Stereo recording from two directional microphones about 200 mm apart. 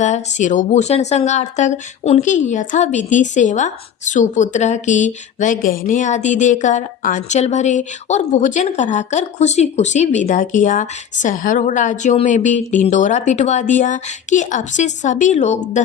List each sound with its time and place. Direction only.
0.0 s speech: 35° left (ahead or behind)